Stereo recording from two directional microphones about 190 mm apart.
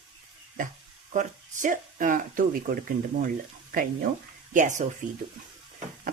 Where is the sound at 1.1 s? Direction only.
45° right (ahead or behind).